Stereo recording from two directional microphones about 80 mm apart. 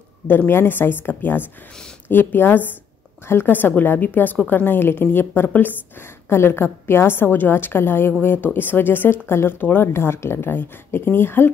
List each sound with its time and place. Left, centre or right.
0.3 s speech: left